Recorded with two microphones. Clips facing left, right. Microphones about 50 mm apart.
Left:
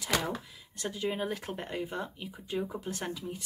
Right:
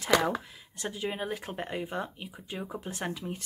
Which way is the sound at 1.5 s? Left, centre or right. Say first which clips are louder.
Right 2 dB; centre.